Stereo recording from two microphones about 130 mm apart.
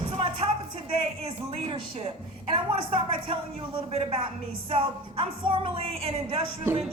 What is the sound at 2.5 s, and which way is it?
Music, 45° right (ahead or behind).